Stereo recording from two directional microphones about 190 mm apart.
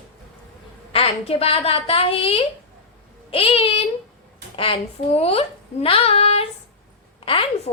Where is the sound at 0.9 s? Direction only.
30° left (ahead or behind).